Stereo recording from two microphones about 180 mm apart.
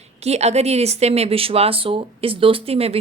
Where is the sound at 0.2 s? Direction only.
35° right (ahead or behind).